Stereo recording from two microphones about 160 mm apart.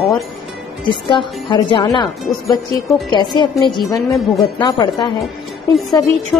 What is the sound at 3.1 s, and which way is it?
Speech, 30° left (ahead or behind).